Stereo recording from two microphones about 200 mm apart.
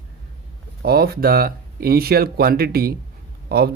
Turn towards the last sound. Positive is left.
turn(degrees=-50)  # may be behind; listen again after turning